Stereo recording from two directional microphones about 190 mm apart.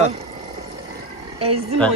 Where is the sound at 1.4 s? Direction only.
30° right (ahead or behind).